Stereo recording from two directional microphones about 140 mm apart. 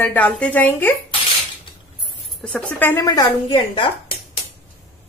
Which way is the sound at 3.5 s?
40° left (ahead or behind).